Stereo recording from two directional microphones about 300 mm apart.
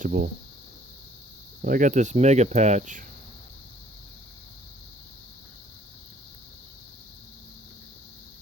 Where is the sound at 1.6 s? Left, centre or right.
Right.